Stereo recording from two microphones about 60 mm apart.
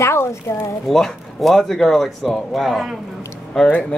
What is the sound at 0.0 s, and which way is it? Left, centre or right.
Speech, left.